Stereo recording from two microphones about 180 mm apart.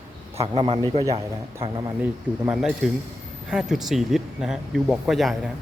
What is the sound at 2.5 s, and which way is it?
Speech, 5° right (ahead or behind).